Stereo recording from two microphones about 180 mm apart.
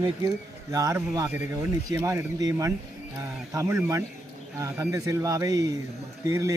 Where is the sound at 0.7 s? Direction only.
15° right (ahead or behind).